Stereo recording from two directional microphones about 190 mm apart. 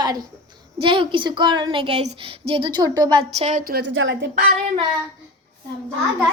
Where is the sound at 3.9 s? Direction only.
85° right.